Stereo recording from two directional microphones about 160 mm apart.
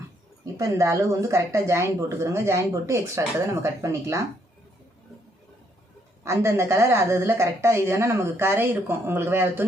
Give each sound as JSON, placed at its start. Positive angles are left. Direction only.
{"t": 0.4, "sound": "speech", "side_deg": -20}
{"t": 6.2, "sound": "speech", "side_deg": -15}